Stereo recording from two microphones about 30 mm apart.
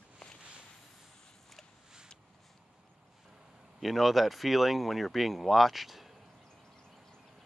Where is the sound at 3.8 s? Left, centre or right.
Centre.